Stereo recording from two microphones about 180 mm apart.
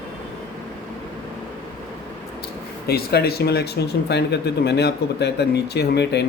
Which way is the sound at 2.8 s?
65° left (ahead or behind).